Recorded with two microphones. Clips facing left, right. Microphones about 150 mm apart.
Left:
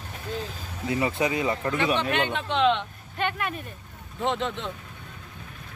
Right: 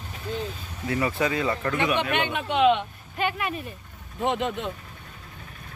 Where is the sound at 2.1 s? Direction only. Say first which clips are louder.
Right 1 dB; 15° right (ahead or behind).